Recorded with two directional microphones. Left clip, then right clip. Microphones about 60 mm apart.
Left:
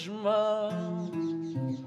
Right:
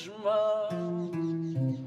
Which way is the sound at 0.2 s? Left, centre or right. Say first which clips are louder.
Even; left.